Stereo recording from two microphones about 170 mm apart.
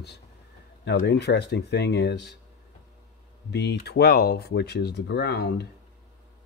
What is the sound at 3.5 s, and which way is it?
Speech, 85° left.